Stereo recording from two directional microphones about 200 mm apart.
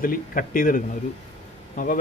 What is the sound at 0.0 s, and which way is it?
A man's voice, 45° left (ahead or behind).